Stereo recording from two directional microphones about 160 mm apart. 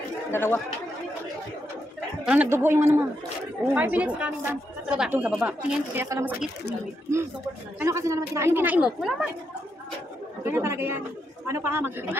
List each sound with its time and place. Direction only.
0.3 s speech: 15° left (ahead or behind)
2.2 s a woman's voice: 10° right (ahead or behind)
6.0 s speech: 20° right (ahead or behind)
7.8 s a woman's voice: 20° right (ahead or behind)
10.4 s a woman's voice: 15° right (ahead or behind)